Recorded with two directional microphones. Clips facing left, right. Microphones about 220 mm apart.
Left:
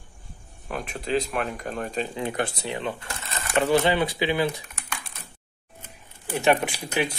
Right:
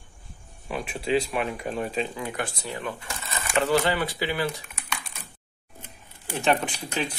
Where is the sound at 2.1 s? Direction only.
25° left (ahead or behind).